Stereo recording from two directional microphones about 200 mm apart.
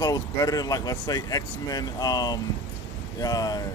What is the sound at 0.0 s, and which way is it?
Speech, 15° left (ahead or behind).